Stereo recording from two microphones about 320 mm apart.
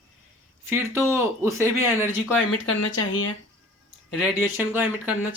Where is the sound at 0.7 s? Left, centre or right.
Centre.